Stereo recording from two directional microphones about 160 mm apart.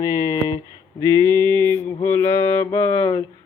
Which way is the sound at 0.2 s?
20° left (ahead or behind).